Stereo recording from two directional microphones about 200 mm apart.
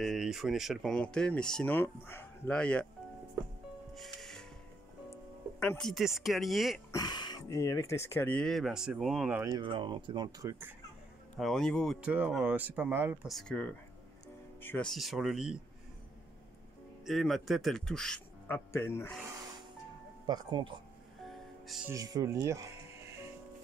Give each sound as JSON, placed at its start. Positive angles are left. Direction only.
{"t": 0.0, "sound": "speech", "side_deg": 0}
{"t": 3.9, "sound": "music", "side_deg": 0}
{"t": 5.1, "sound": "speech", "side_deg": 10}
{"t": 6.9, "sound": "speech", "side_deg": 20}
{"t": 9.4, "sound": "speech", "side_deg": -20}
{"t": 11.3, "sound": "speech", "side_deg": 0}
{"t": 17.0, "sound": "speech", "side_deg": 0}
{"t": 20.2, "sound": "speech", "side_deg": -20}
{"t": 21.6, "sound": "speech", "side_deg": 0}
{"t": 21.9, "sound": "speech", "side_deg": -15}